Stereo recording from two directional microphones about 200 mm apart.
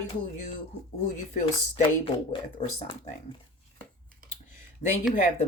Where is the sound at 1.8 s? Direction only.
30° left (ahead or behind).